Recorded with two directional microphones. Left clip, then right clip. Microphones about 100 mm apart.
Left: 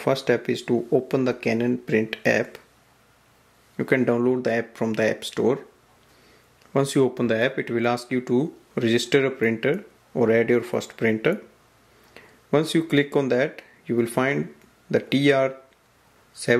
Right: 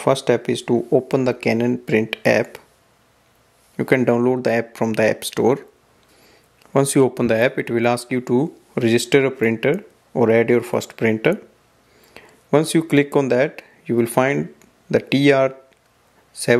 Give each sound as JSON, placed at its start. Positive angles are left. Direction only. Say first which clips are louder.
{"t": 0.0, "sound": "speech", "louder": "right 4 dB", "side_deg": -40}
{"t": 3.7, "sound": "speech", "louder": "right 4 dB", "side_deg": -40}